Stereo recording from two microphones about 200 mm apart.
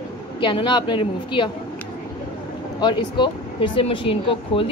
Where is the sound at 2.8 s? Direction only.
25° left (ahead or behind).